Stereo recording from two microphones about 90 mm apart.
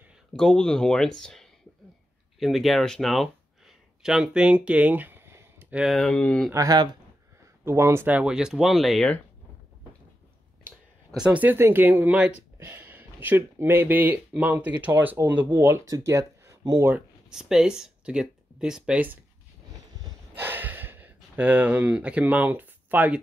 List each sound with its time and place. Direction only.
0.3 s speech: 5° left (ahead or behind); by 5.8 s 25° right (ahead or behind)
5.8 s speech: centre (ahead or behind)
6.5 s speech: 40° right (ahead or behind)
7.6 s speech: 30° right (ahead or behind)
8.1 s speech: 10° right (ahead or behind)
11.1 s speech: 15° right (ahead or behind)
15.9 s speech: 35° right (ahead or behind)
17.3 s speech: 5° right (ahead or behind)
20.3 s a sound: 20° right (ahead or behind)